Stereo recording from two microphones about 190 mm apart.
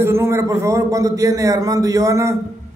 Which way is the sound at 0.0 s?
15° right (ahead or behind).